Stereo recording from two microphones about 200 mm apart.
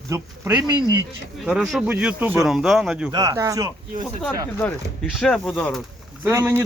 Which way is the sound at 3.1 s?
20° right (ahead or behind).